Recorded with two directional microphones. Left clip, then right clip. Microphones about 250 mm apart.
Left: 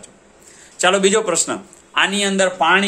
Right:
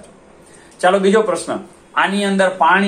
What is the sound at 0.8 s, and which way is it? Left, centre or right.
A man's voice, left.